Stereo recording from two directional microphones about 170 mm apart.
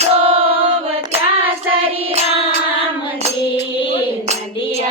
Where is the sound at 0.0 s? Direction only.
35° right (ahead or behind).